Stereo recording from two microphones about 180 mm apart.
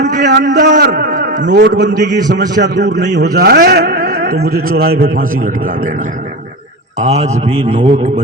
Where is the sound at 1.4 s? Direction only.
70° right (ahead or behind); by 5.9 s 50° right (ahead or behind).